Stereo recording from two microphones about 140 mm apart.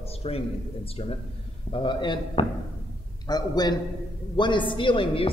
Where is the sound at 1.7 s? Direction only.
35° left (ahead or behind).